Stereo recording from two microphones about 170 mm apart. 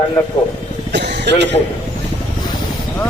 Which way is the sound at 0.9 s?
90° right.